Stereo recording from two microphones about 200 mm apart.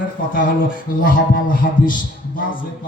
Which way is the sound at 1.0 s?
45° left (ahead or behind).